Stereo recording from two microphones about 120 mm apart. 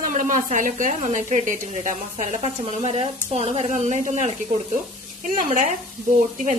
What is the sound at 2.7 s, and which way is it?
Speech, 60° right (ahead or behind).